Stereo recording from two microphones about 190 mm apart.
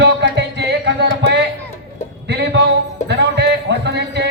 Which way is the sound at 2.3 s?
65° right (ahead or behind).